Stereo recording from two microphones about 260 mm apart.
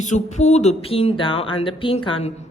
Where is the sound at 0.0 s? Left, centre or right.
Left.